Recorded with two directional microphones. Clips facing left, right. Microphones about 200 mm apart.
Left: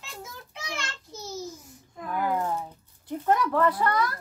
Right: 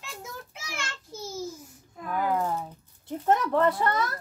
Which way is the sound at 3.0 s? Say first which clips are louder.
Even; 25° right (ahead or behind).